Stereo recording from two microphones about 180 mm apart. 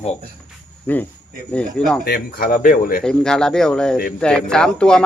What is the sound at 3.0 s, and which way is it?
Speech, 5° left (ahead or behind).